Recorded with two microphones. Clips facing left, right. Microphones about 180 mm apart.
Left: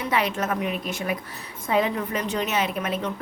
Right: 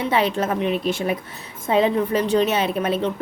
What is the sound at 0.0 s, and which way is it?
A woman's voice, 25° right (ahead or behind).